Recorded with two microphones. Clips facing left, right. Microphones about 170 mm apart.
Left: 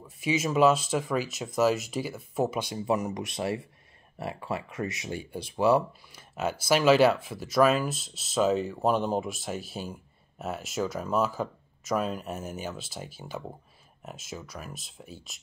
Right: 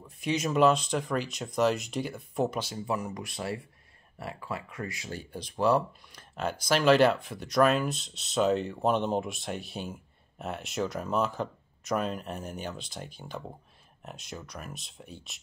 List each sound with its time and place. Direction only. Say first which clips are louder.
0.2 s speech: left 1 dB; 5° left (ahead or behind)
2.6 s speech: left 4 dB; 20° left (ahead or behind); by 15.4 s centre (ahead or behind)